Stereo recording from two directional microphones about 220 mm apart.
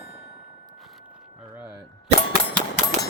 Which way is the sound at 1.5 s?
10° right (ahead or behind).